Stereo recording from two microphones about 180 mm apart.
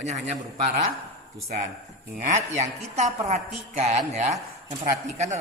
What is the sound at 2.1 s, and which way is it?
A woman's voice, 40° right (ahead or behind).